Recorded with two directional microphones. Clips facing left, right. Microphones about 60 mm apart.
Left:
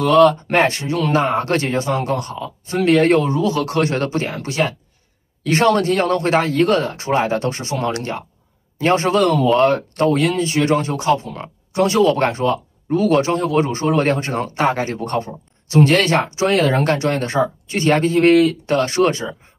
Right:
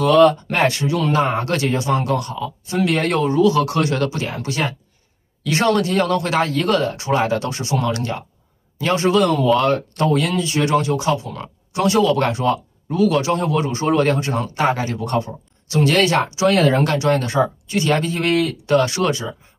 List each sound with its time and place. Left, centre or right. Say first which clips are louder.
0.4 s a man's voice: left 2 dB; left